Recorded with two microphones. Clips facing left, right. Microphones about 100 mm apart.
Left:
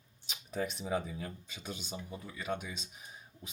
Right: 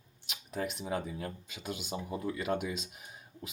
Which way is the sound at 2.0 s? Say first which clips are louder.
Right 7 dB; 40° right (ahead or behind).